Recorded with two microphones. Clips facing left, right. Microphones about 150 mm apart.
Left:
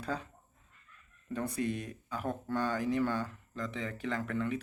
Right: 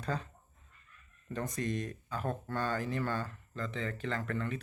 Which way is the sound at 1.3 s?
10° left (ahead or behind).